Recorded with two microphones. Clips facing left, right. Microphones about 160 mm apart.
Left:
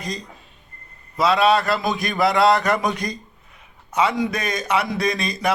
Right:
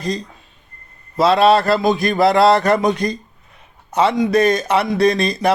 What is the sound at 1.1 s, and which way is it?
Speech, 35° right (ahead or behind).